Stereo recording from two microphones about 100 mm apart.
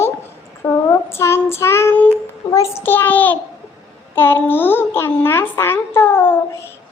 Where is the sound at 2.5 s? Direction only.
30° left (ahead or behind).